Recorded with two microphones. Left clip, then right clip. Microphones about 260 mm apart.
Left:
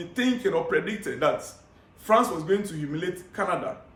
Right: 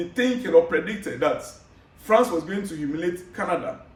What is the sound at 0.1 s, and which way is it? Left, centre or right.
A man's voice, centre.